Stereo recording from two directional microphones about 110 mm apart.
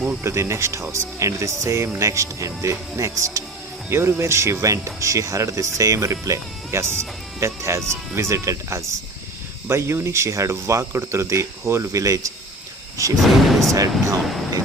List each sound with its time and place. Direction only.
0.0 s speech: 15° right (ahead or behind)
13.5 s speech: centre (ahead or behind)
13.7 s speech: 30° right (ahead or behind)